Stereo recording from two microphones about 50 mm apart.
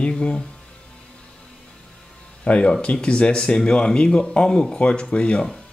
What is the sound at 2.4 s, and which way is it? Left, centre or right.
Speech, left.